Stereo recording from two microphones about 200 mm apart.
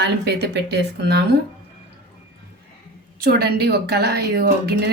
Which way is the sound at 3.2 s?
50° right (ahead or behind).